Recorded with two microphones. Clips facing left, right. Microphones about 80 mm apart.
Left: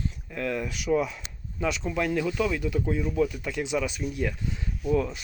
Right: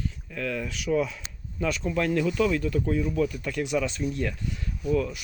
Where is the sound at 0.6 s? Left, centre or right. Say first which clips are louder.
Even; centre.